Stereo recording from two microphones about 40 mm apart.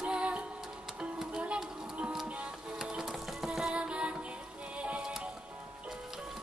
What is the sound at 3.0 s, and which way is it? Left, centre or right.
Music, centre.